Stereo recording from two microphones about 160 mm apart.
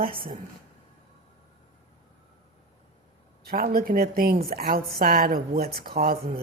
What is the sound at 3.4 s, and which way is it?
Speech, 65° right (ahead or behind).